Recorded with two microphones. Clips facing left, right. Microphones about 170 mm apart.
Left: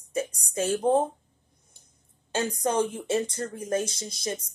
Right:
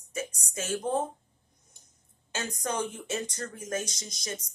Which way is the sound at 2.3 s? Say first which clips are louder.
Left 7 dB; 30° left (ahead or behind).